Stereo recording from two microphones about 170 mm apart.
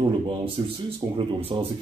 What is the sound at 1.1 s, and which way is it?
Speech, 35° right (ahead or behind).